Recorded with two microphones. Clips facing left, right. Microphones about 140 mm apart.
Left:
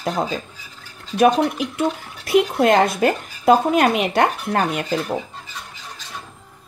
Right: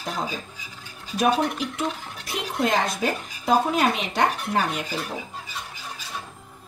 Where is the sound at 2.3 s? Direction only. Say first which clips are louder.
Left 9 dB; 65° left (ahead or behind).